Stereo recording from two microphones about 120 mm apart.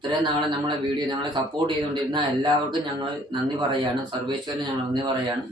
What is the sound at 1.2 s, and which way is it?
Speech, 40° right (ahead or behind).